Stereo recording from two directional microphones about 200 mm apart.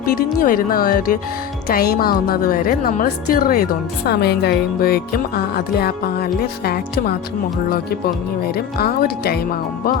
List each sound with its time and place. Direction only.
0.0 s a woman's voice: 45° left (ahead or behind)